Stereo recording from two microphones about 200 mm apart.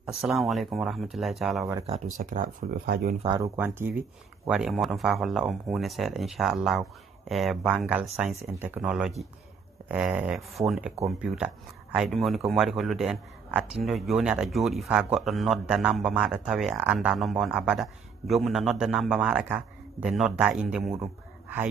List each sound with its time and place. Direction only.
0.0 s a man's voice: centre (ahead or behind)
2.1 s speech: 40° right (ahead or behind)
3.2 s speech: 25° right (ahead or behind)
3.5 s a man's voice: 10° right (ahead or behind)
20.9 s a sound: 15° right (ahead or behind)